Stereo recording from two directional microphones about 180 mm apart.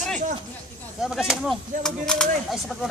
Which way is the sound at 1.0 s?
Centre (ahead or behind).